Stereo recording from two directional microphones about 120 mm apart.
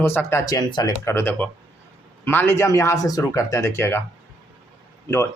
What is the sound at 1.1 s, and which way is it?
Speech, 20° left (ahead or behind).